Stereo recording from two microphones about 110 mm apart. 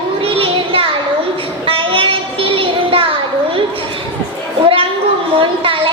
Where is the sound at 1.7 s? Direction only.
55° right (ahead or behind).